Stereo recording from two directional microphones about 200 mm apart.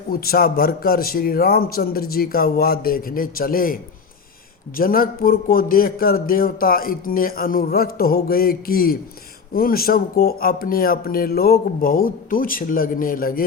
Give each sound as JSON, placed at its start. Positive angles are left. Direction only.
{"t": 0.1, "sound": "speech", "side_deg": 50}
{"t": 4.8, "sound": "speech", "side_deg": 45}